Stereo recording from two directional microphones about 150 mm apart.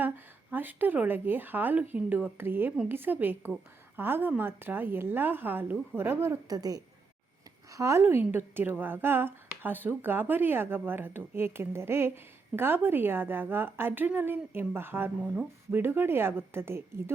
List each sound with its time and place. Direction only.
0.5 s a woman's voice: 10° right (ahead or behind)